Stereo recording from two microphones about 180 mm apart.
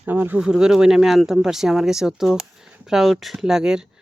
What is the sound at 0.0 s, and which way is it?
Speech, 10° right (ahead or behind).